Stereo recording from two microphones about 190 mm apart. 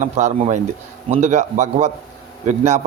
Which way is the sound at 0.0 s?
40° right (ahead or behind).